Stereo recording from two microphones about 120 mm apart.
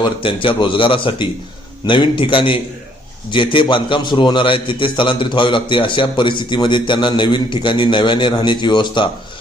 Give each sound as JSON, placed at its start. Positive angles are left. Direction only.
{"t": 0.0, "sound": "a man's voice", "side_deg": 45}